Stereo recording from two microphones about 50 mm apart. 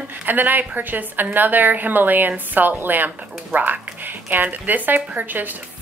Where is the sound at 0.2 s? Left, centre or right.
Right.